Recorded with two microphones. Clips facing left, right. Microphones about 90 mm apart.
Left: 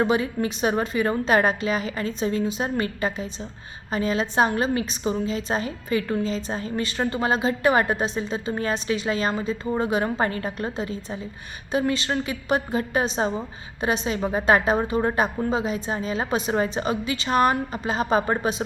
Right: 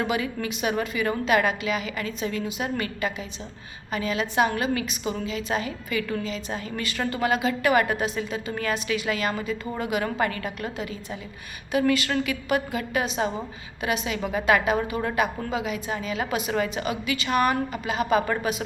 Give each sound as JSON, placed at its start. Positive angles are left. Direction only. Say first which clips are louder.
{"t": 0.0, "sound": "a woman's voice", "louder": "left 5 dB", "side_deg": 30}